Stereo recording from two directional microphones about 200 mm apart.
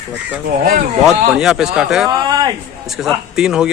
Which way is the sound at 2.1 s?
20° right (ahead or behind).